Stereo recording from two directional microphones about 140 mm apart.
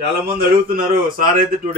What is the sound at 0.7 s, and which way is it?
Speech, 80° right.